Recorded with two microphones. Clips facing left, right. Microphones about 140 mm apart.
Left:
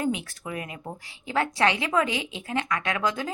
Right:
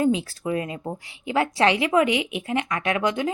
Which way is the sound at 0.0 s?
25° right (ahead or behind).